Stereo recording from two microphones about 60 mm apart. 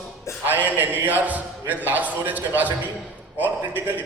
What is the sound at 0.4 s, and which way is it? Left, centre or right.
A man's voice, right.